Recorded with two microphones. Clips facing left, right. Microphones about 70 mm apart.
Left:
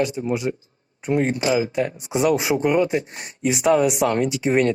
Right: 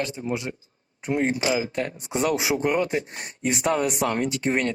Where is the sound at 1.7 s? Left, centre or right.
Centre.